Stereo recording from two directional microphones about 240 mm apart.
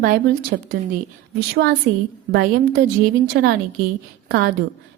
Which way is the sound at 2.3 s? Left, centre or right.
Right.